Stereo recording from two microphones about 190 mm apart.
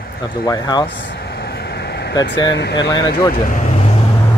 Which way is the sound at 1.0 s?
60° left (ahead or behind).